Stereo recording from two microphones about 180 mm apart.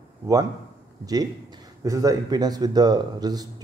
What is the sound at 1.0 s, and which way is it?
Speech, 20° right (ahead or behind).